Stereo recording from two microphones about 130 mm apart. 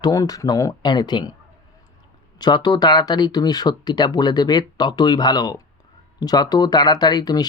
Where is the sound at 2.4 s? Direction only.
30° left (ahead or behind).